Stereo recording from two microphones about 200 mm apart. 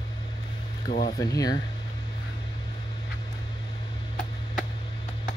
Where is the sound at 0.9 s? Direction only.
45° left (ahead or behind).